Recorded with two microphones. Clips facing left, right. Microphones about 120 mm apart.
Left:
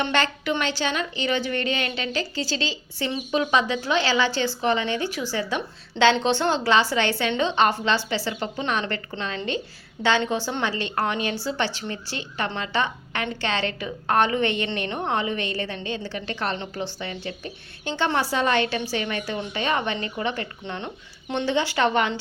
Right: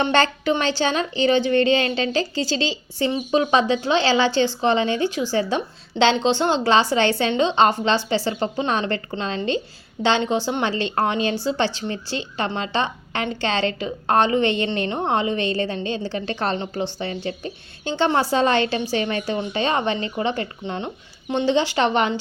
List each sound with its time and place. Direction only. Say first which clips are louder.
0.0 s a woman's voice: right 5 dB; 30° right (ahead or behind)